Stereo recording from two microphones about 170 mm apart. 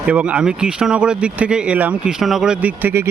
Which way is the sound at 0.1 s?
5° right (ahead or behind).